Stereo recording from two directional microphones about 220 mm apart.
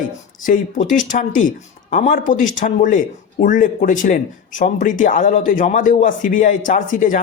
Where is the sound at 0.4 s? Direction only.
35° left (ahead or behind).